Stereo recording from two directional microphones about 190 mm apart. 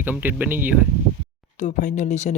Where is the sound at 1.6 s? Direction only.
40° left (ahead or behind).